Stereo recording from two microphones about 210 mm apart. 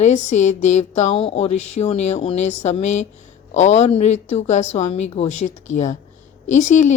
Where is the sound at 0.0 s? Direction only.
35° left (ahead or behind).